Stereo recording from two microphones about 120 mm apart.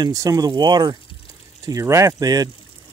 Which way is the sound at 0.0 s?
30° right (ahead or behind).